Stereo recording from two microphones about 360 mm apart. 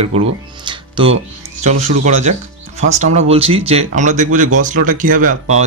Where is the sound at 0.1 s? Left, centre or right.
Centre.